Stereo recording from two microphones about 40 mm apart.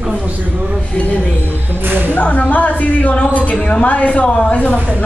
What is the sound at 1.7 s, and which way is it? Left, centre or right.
Speech, right.